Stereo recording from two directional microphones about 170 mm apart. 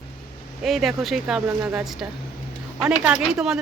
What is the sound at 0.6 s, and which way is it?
A woman's voice, centre (ahead or behind).